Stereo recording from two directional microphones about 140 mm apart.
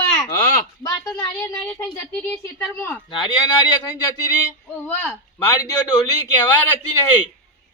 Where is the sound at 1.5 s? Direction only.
10° left (ahead or behind).